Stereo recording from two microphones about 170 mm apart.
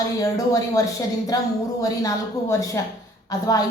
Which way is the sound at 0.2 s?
20° left (ahead or behind).